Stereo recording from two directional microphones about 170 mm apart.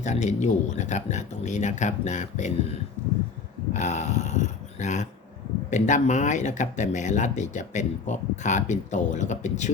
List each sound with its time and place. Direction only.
0.0 s speech: 45° left (ahead or behind)
3.7 s speech: 45° left (ahead or behind)